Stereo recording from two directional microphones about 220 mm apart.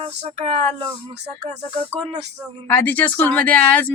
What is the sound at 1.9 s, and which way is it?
Music, 30° right (ahead or behind).